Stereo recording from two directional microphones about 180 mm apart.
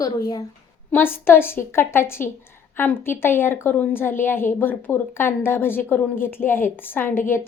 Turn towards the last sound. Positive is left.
turn(degrees=15)  # may be behind; listen again after turning